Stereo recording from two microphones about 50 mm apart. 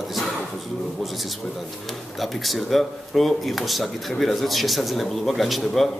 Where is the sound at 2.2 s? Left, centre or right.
Centre.